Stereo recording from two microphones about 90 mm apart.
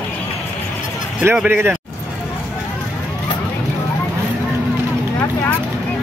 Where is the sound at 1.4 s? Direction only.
25° right (ahead or behind).